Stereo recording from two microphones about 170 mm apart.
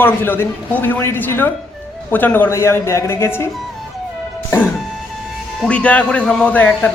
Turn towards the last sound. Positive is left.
turn(degrees=10)  # may be behind; listen again after turning